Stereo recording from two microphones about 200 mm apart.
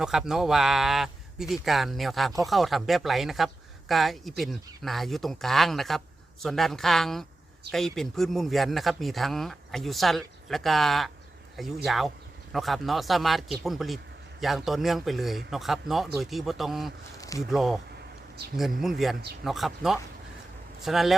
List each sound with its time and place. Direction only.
0.0 s speech: 5° right (ahead or behind)
17.2 s a sound: 15° left (ahead or behind)
17.5 s speech: centre (ahead or behind)
18.8 s speech: centre (ahead or behind)